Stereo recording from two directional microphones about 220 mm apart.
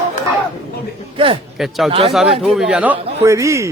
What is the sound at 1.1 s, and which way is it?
Speech, 25° right (ahead or behind).